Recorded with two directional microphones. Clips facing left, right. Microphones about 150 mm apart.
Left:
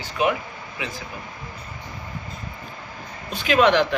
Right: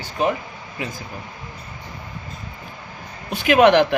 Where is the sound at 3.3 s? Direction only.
60° right (ahead or behind).